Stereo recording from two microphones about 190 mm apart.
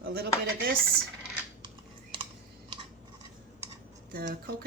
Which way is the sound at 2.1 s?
25° right (ahead or behind).